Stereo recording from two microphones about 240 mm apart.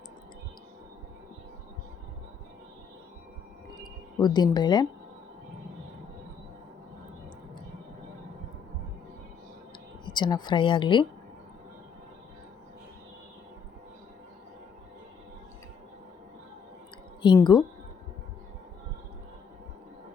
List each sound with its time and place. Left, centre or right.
4.2 s speech: centre
10.1 s speech: centre
17.2 s speech: centre